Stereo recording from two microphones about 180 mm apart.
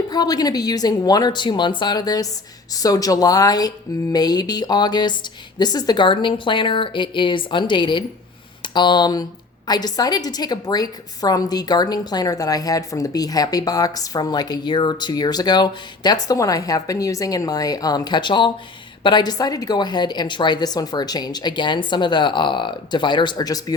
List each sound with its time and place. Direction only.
0.1 s a woman's voice: 20° left (ahead or behind)